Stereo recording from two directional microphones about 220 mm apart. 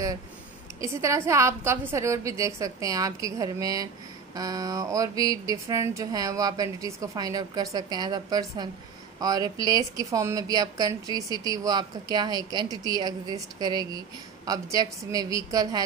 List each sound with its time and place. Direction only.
0.7 s a woman's voice: 15° right (ahead or behind)